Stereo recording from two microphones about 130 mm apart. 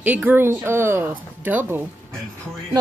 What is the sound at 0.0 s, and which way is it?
Speech, 15° right (ahead or behind).